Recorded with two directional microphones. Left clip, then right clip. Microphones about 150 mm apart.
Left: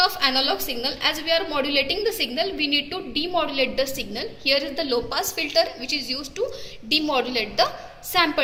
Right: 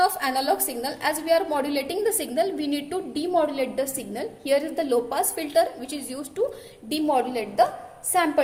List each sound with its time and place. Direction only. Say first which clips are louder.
0.0 s a woman's voice: left 2 dB; 45° right (ahead or behind)
6.9 s a woman's voice: left 2 dB; 40° right (ahead or behind)